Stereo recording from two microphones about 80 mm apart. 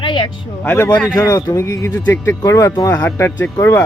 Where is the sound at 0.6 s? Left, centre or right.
Left.